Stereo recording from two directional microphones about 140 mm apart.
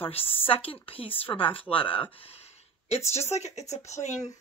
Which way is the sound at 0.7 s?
40° left (ahead or behind).